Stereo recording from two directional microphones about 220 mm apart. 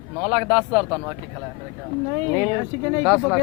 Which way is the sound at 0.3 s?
25° right (ahead or behind).